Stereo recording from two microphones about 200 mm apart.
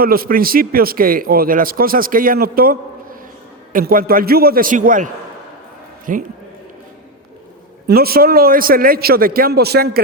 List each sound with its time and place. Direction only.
0.0 s a man's voice: 50° right (ahead or behind)
6.1 s a man's voice: 40° right (ahead or behind)
7.9 s a man's voice: 50° right (ahead or behind)